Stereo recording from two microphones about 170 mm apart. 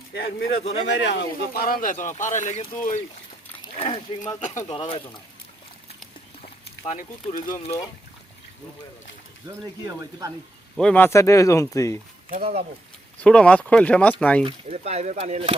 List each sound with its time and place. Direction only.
0.1 s speech: 80° left
0.9 s speech: 90° left; by 2.9 s 45° left (ahead or behind)
3.8 s speech: 35° left (ahead or behind)
6.4 s speech: 40° left (ahead or behind)
9.8 s speech: 20° right (ahead or behind)
10.8 s speech: 5° left (ahead or behind)
12.4 s speech: 35° right (ahead or behind)
13.1 s speech: 5° left (ahead or behind)
14.4 s speech: 40° right (ahead or behind)